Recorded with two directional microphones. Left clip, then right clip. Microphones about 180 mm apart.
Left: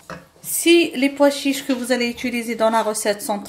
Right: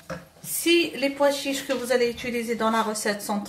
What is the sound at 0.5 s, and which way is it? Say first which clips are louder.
Speech: left 6 dB; 55° left (ahead or behind).